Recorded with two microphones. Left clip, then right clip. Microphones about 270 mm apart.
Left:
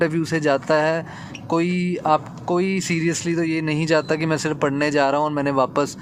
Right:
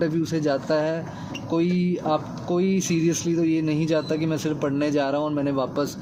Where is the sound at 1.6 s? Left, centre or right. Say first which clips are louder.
Left 1 dB; left.